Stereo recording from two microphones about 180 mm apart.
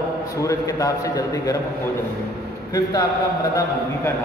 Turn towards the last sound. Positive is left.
turn(degrees=20)  # may be behind; listen again after turning